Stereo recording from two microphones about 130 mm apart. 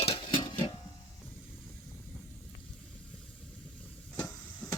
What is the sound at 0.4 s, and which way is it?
Music, 35° left (ahead or behind).